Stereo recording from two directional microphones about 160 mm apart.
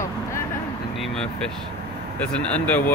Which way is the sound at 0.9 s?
Centre (ahead or behind).